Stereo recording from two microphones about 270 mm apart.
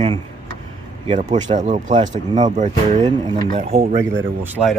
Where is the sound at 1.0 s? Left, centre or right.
Right.